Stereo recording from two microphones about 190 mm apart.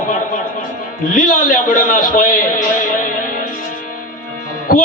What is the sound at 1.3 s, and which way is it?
A man's voice, 45° left (ahead or behind).